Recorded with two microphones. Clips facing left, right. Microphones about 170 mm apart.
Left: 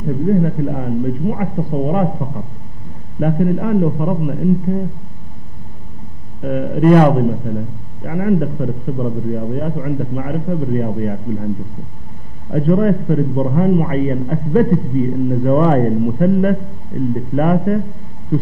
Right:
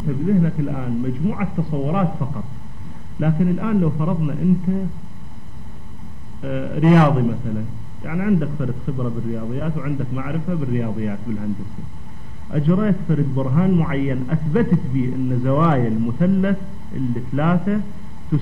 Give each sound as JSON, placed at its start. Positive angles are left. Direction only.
{"t": 0.0, "sound": "a man's voice", "side_deg": 40}
{"t": 3.2, "sound": "a man's voice", "side_deg": 45}
{"t": 6.4, "sound": "a man's voice", "side_deg": 45}